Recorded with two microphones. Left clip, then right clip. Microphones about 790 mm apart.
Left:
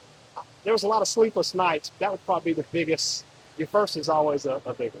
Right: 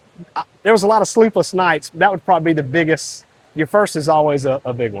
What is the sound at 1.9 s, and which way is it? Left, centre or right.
Speech, right.